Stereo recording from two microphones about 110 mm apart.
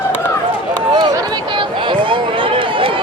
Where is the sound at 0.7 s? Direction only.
35° right (ahead or behind).